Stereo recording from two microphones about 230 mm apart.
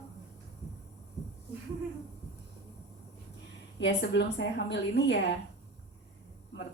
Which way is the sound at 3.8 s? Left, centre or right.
Left.